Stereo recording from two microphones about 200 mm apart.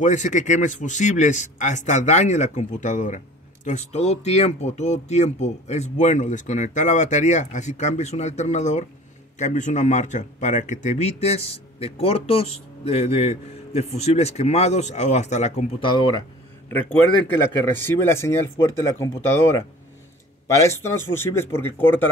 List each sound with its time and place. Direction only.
0.0 s a man's voice: 40° left (ahead or behind)
16.6 s a man's voice: 10° left (ahead or behind)